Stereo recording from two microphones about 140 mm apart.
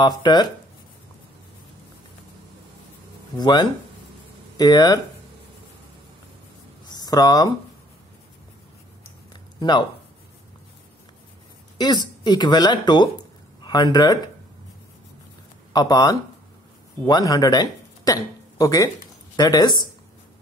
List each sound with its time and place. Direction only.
0.0 s speech: 30° left (ahead or behind)
3.3 s speech: 30° left (ahead or behind)
6.9 s speech: 30° left (ahead or behind)
9.6 s speech: 30° left (ahead or behind)
11.8 s speech: 30° left (ahead or behind)
15.7 s speech: 30° left (ahead or behind)